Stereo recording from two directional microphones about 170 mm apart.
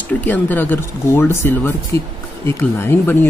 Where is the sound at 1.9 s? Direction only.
30° right (ahead or behind).